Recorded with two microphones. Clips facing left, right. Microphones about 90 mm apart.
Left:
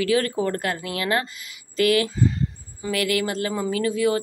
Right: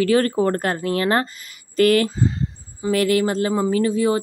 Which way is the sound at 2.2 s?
30° right (ahead or behind).